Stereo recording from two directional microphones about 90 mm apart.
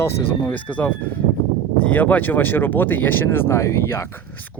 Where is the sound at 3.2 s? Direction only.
30° left (ahead or behind).